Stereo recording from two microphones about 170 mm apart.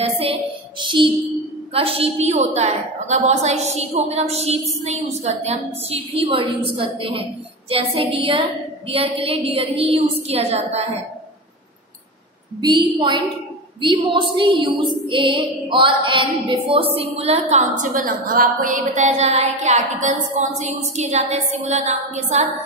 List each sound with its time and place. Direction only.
0.0 s child singing: 35° right (ahead or behind)
1.7 s a woman's voice: 35° right (ahead or behind)
12.5 s a woman's voice: 25° right (ahead or behind)
17.7 s a woman's voice: 55° right (ahead or behind)